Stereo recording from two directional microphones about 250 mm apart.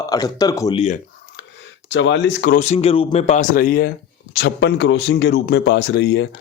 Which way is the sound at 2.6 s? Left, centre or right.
Left.